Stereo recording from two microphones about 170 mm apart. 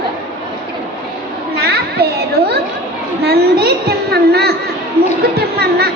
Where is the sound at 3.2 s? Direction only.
65° right (ahead or behind).